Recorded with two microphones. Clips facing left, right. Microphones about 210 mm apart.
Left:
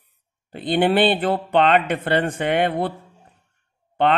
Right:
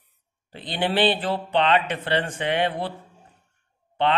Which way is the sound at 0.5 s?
55° left (ahead or behind).